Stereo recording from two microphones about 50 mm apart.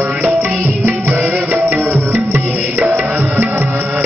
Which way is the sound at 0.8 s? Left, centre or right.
Right.